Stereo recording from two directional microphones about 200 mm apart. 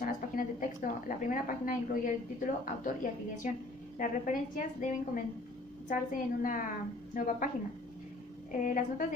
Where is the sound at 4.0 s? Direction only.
40° left (ahead or behind).